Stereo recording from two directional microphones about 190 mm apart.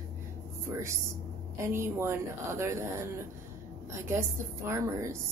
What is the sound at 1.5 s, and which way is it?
Speech, 15° right (ahead or behind).